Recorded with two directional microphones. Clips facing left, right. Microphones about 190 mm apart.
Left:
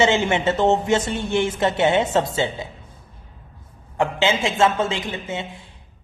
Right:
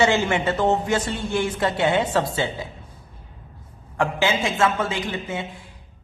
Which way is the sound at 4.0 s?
25° left (ahead or behind).